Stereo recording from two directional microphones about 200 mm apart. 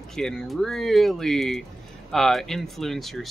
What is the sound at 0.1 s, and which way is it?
Speech, 5° left (ahead or behind).